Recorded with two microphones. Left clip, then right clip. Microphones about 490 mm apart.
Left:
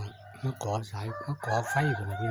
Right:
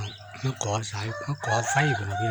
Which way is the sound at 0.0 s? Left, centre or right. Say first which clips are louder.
Right 5 dB; left.